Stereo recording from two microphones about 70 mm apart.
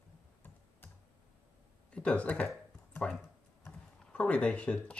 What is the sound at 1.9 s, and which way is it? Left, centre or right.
Speech, centre.